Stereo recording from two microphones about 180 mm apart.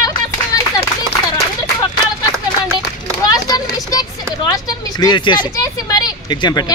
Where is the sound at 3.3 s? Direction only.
20° left (ahead or behind).